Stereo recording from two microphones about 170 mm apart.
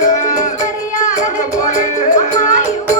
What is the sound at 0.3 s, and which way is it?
Music, 45° left (ahead or behind).